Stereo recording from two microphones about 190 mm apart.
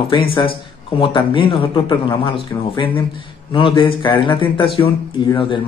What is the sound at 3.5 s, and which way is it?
Speech, 25° left (ahead or behind).